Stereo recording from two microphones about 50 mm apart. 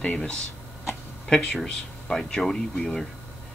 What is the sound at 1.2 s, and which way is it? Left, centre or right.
Speech, centre.